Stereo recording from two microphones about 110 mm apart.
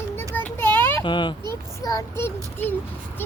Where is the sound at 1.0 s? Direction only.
45° left (ahead or behind).